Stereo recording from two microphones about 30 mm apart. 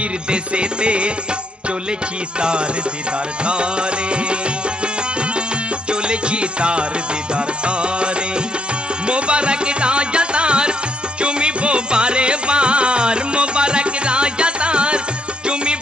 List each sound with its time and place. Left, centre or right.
0.3 s music: right
3.4 s music: right
5.9 s music: right